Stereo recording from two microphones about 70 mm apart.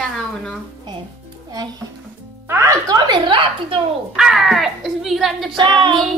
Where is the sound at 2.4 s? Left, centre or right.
Right.